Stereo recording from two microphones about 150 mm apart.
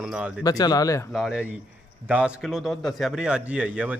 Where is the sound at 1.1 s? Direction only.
5° right (ahead or behind).